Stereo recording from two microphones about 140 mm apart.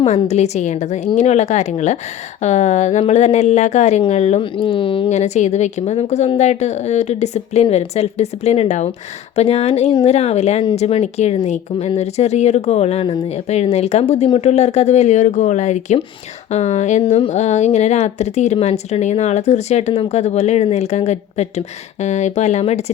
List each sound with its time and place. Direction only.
0.0 s a woman's voice: 50° left (ahead or behind)
4.5 s speech: 35° left (ahead or behind)
5.0 s a woman's voice: 55° left (ahead or behind)
17.1 s speech: 40° left (ahead or behind)
17.3 s a woman's voice: 55° left (ahead or behind)